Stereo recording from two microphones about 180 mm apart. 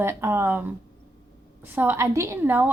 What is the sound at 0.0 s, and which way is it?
A woman's voice, 15° right (ahead or behind).